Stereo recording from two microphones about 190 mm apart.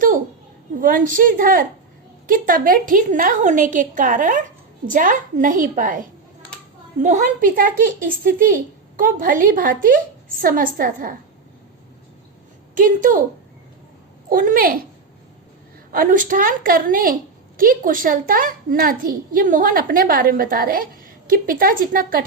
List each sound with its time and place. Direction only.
0.8 s a child's voice: 45° right (ahead or behind)
12.7 s a child's voice: 45° right (ahead or behind)
14.3 s a child's voice: 45° right (ahead or behind)
15.9 s a child's voice: 45° right (ahead or behind)